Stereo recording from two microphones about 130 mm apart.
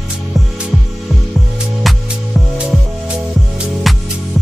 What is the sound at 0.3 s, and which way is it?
Music, centre (ahead or behind).